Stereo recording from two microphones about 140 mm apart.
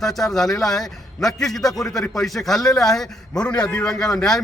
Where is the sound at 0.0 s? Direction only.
Centre (ahead or behind).